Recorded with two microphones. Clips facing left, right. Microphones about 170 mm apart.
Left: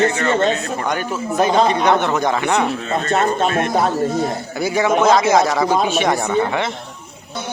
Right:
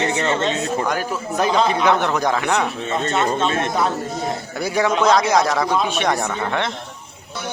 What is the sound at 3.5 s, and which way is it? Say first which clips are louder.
Speech: left 3 dB; 25° right (ahead or behind).